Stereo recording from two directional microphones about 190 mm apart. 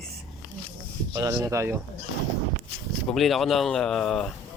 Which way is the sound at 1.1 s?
20° right (ahead or behind).